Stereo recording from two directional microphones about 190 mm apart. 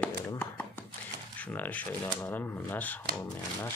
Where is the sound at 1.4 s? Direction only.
10° left (ahead or behind).